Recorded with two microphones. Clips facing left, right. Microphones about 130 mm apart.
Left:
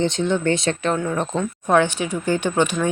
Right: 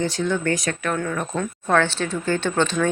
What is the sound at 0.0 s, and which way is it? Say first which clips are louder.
Speech: left 3 dB; 20° left (ahead or behind).